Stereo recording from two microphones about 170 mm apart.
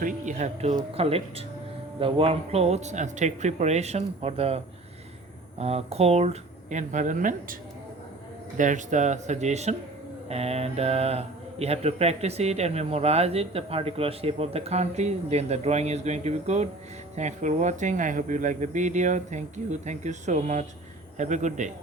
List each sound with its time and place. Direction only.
0.0 s speech: 45° right (ahead or behind)
8.5 s speech: 45° right (ahead or behind)